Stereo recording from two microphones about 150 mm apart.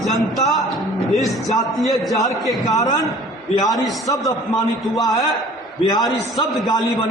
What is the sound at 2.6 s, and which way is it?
Speech, 25° left (ahead or behind).